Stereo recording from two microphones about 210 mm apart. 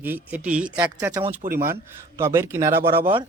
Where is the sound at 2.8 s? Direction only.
45° right (ahead or behind).